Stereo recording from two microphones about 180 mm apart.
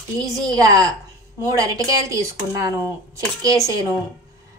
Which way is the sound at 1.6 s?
20° right (ahead or behind).